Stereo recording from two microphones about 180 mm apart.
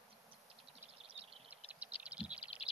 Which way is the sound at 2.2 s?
35° left (ahead or behind).